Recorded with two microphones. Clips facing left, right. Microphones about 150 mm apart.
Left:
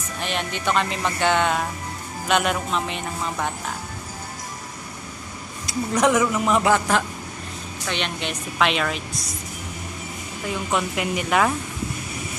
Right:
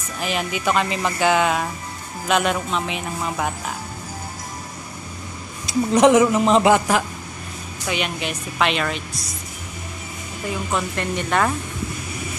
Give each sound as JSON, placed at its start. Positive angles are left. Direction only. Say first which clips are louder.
{"t": 0.2, "sound": "speech", "louder": "right 3 dB", "side_deg": -5}
{"t": 5.7, "sound": "a woman's voice", "louder": "right 6 dB", "side_deg": -25}
{"t": 7.8, "sound": "speech", "louder": "right 3 dB", "side_deg": -5}
{"t": 10.5, "sound": "speech", "louder": "even", "side_deg": 0}